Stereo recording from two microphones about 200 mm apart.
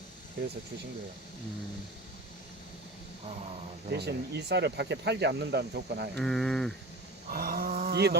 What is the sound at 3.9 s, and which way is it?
Speech, 55° right (ahead or behind).